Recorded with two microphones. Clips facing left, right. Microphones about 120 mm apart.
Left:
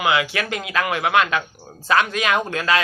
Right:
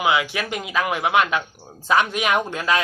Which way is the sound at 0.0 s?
5° right (ahead or behind).